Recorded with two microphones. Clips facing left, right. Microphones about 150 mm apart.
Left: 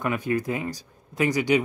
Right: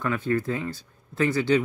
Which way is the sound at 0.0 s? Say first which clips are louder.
Even; 15° left (ahead or behind).